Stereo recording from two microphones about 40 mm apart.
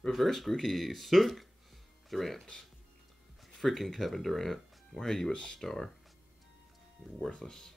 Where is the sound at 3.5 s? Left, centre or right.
Centre.